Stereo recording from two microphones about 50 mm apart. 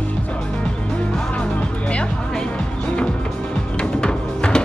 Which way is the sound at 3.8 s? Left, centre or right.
Centre.